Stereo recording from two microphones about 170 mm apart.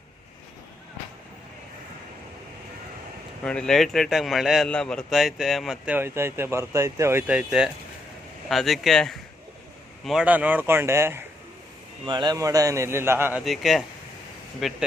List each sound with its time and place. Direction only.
3.4 s a man's voice: 5° left (ahead or behind); by 11.3 s 15° right (ahead or behind)
12.0 s a man's voice: 25° right (ahead or behind)
13.4 s a man's voice: centre (ahead or behind)